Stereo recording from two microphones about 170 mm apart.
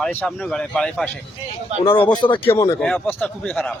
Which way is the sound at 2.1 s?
30° left (ahead or behind).